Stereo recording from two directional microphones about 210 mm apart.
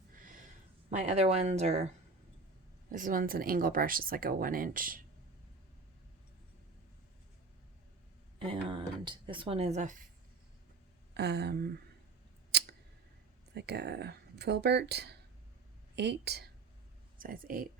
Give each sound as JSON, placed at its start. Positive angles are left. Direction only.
{"t": 0.9, "sound": "speech", "side_deg": -30}
{"t": 2.9, "sound": "speech", "side_deg": -40}
{"t": 8.4, "sound": "speech", "side_deg": -25}
{"t": 11.1, "sound": "speech", "side_deg": -50}
{"t": 12.5, "sound": "a sound", "side_deg": -50}
{"t": 13.5, "sound": "speech", "side_deg": -50}